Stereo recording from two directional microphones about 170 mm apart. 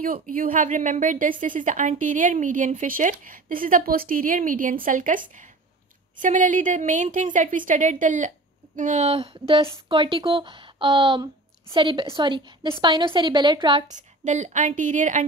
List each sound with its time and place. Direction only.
0.0 s a woman's voice: 55° right (ahead or behind); by 13.8 s 30° right (ahead or behind)
14.2 s a woman's voice: 45° right (ahead or behind)